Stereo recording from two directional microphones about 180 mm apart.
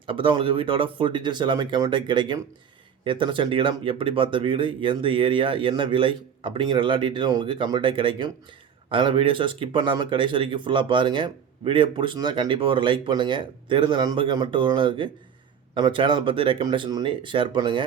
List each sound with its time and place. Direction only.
0.1 s speech: 30° right (ahead or behind)